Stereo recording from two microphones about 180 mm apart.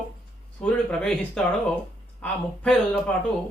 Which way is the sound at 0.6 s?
5° left (ahead or behind).